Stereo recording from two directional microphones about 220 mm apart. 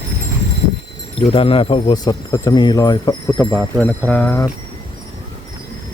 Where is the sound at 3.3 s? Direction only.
5° left (ahead or behind).